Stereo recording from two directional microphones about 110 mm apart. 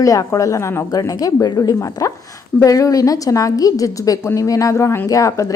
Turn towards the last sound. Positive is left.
turn(degrees=30)  # may be behind; listen again after turning